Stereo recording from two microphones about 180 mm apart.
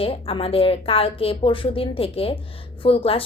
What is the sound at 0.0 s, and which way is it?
A woman's voice, 30° left (ahead or behind).